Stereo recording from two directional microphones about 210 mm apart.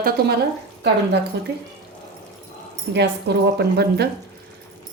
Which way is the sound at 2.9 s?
55° right (ahead or behind).